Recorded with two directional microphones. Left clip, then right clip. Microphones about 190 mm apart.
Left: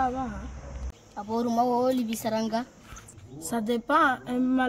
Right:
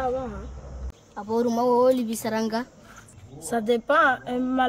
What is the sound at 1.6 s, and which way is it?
Speech, 25° right (ahead or behind).